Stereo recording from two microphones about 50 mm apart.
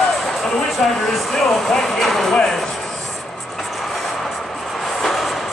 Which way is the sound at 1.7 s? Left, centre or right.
Centre.